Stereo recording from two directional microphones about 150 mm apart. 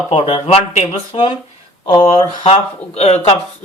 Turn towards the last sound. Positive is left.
turn(degrees=45)  # may be behind; listen again after turning